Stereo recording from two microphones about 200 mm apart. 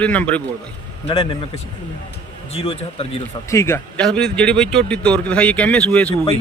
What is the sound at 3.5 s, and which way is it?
Speech, 15° left (ahead or behind).